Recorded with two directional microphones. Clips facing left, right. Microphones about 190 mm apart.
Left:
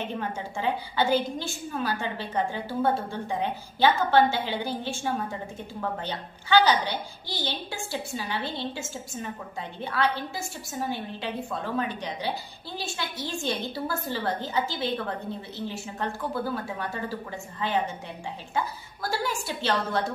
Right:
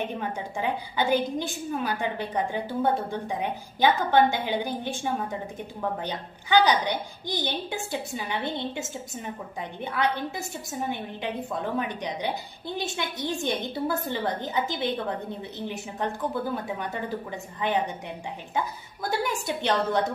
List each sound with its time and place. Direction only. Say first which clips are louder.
0.6 s a woman's voice: left 1 dB; 15° right (ahead or behind)
19.0 s a woman's voice: right 2 dB; 20° right (ahead or behind)